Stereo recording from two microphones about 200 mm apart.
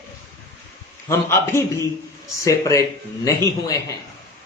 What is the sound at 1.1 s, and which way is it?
A man's voice, 10° left (ahead or behind).